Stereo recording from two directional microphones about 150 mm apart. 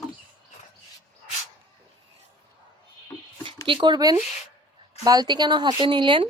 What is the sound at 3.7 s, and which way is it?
A woman's voice, 30° right (ahead or behind).